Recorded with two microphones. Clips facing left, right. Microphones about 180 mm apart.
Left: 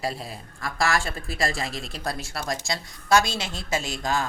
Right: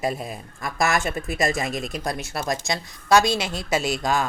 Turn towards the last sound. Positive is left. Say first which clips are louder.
# right 4 dB
turn(degrees=-20)  # may be behind; listen again after turning